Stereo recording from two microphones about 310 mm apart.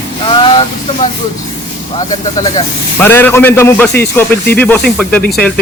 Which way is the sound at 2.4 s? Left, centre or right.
Centre.